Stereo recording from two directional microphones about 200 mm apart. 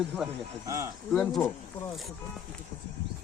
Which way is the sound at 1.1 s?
Centre (ahead or behind).